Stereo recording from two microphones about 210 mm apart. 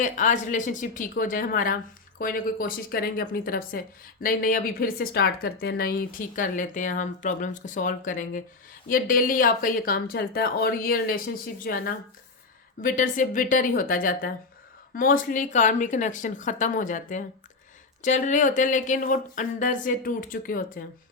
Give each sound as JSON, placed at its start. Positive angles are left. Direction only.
{"t": 0.0, "sound": "a woman's voice", "side_deg": 35}